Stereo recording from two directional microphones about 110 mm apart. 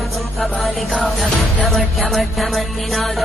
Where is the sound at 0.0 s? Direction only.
Centre (ahead or behind).